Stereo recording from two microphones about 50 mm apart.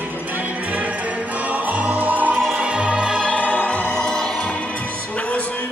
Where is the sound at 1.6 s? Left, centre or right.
Right.